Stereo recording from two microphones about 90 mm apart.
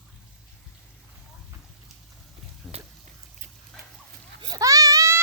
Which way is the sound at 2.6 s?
Centre (ahead or behind).